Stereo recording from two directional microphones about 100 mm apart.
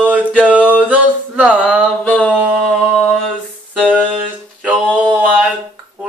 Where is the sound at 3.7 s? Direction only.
10° left (ahead or behind).